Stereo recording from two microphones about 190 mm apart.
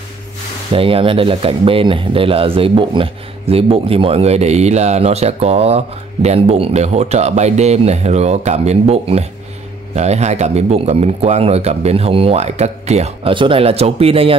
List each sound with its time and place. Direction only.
0.7 s speech: 30° right (ahead or behind)